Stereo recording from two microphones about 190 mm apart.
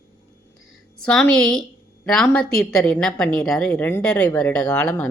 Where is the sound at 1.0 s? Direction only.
5° left (ahead or behind).